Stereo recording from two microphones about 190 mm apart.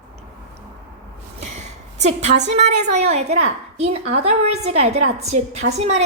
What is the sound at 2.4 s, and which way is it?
A woman's voice, 35° right (ahead or behind).